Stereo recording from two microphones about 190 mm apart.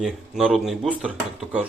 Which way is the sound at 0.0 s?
Centre (ahead or behind).